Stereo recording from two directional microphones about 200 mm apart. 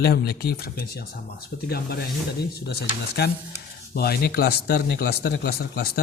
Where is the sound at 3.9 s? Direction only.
50° left (ahead or behind).